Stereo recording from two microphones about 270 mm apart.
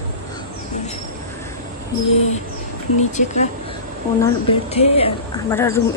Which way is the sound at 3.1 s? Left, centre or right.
Left.